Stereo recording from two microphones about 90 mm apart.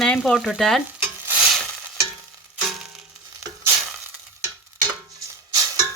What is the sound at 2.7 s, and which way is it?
Music, 5° right (ahead or behind).